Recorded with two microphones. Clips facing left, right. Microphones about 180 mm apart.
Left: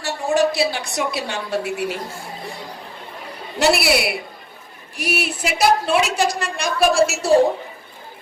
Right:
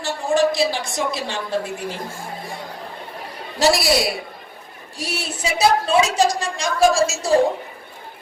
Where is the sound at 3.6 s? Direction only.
65° left (ahead or behind).